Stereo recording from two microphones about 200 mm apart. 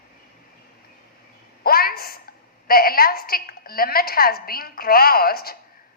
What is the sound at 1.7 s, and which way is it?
A woman's voice, 50° left (ahead or behind).